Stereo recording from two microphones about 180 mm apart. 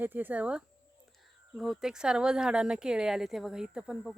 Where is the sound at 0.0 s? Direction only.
10° right (ahead or behind).